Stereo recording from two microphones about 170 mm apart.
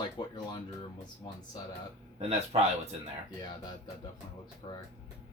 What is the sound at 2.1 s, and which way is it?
Speech, 40° right (ahead or behind).